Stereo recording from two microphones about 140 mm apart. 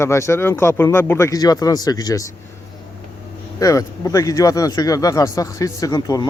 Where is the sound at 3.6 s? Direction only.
25° left (ahead or behind).